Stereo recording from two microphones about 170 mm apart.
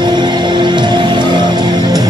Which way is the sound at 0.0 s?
25° right (ahead or behind).